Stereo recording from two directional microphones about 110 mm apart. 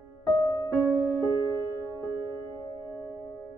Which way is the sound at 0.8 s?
20° right (ahead or behind).